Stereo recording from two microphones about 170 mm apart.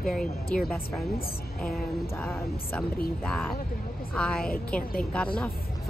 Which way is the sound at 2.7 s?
5° left (ahead or behind).